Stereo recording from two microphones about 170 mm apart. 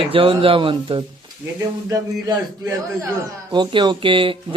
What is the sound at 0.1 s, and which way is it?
Speech, 30° right (ahead or behind).